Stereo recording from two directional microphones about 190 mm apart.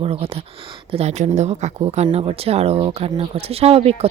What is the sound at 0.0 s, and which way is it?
Speech, 30° right (ahead or behind).